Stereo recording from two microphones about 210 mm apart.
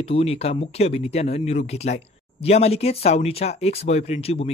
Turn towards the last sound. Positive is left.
turn(degrees=30)  # may be behind; listen again after turning